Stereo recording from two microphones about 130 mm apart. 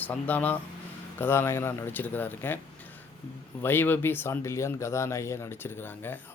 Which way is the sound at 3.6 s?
15° left (ahead or behind).